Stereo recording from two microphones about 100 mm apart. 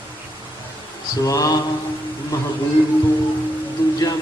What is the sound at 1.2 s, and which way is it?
Speech, 35° left (ahead or behind).